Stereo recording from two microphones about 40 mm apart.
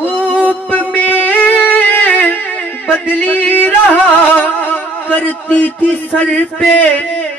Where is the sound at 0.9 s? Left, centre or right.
Left.